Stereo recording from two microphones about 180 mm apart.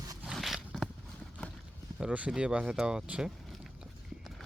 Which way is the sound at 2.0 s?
5° right (ahead or behind).